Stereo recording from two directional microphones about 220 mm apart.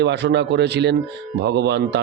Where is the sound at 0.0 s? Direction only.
50° right (ahead or behind).